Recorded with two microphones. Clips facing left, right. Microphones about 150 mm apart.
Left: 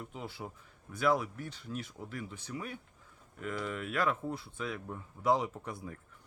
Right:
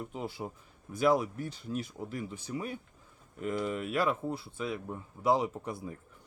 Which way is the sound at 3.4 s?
20° right (ahead or behind).